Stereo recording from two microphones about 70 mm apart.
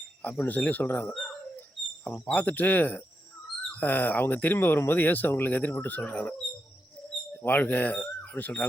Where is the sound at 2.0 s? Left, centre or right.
Left.